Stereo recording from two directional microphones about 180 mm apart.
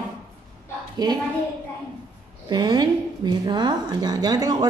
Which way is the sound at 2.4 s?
25° right (ahead or behind).